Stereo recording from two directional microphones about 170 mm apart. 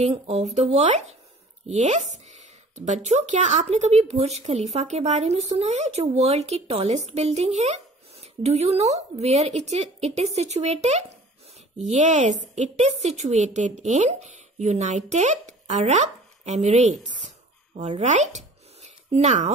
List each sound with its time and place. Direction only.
0.0 s a woman's voice: 40° right (ahead or behind)